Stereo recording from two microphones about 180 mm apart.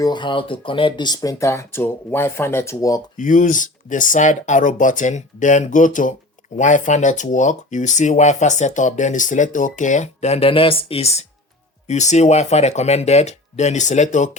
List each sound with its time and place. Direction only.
0.0 s speech: 25° left (ahead or behind)
3.2 s speech: 45° left (ahead or behind)